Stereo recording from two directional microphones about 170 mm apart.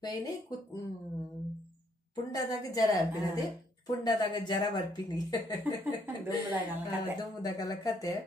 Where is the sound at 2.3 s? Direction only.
20° left (ahead or behind).